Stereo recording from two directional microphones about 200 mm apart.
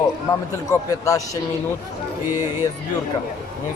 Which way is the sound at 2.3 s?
10° right (ahead or behind).